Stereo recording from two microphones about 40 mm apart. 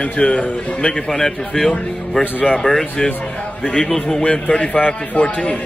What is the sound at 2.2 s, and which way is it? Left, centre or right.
Speech, left.